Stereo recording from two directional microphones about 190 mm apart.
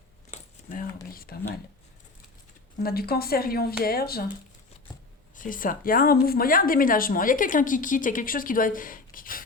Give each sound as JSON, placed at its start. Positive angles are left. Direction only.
{"t": 0.3, "sound": "a sound", "side_deg": 45}
{"t": 1.1, "sound": "a woman's voice", "side_deg": 50}
{"t": 2.8, "sound": "a woman's voice", "side_deg": 55}
{"t": 5.4, "sound": "a woman's voice", "side_deg": 45}